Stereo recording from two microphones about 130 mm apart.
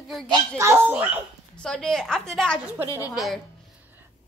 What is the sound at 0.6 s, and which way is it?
Speech, 20° right (ahead or behind).